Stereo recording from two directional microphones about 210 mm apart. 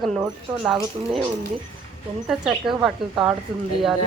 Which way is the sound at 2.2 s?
Centre (ahead or behind).